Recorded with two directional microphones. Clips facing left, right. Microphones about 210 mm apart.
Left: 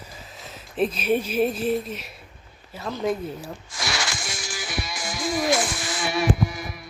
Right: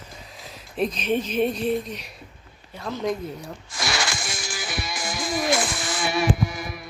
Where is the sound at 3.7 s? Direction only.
55° right (ahead or behind).